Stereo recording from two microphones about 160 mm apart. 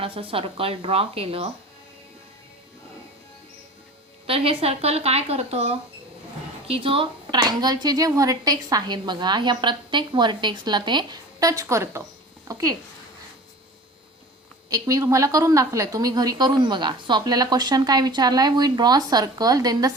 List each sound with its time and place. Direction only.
0.0 s speech: 35° right (ahead or behind)
4.3 s speech: 35° right (ahead or behind)
14.7 s speech: 20° right (ahead or behind)